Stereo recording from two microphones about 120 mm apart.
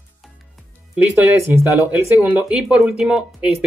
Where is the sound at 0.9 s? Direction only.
15° right (ahead or behind).